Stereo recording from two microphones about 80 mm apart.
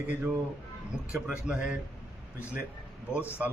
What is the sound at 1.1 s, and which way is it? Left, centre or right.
Speech, centre.